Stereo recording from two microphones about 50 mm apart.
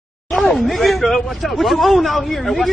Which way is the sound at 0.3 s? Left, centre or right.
Centre.